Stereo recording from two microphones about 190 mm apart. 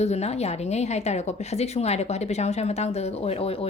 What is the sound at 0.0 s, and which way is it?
A woman's voice, 35° left (ahead or behind).